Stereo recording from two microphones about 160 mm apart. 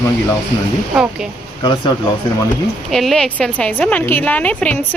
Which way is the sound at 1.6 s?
30° left (ahead or behind).